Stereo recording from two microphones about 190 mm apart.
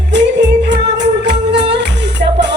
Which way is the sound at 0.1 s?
65° right (ahead or behind).